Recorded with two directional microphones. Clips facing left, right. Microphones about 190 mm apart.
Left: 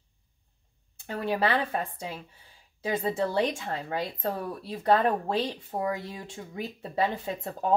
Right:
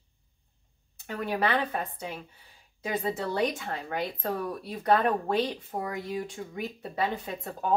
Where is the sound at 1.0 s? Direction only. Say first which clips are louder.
Left 2 dB; 30° left (ahead or behind).